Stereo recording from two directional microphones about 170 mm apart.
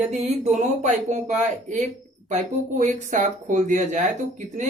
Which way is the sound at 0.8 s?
45° right (ahead or behind).